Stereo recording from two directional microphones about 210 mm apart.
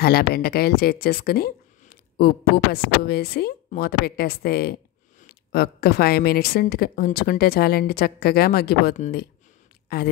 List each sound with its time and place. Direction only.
0.0 s a woman's voice: 50° left (ahead or behind)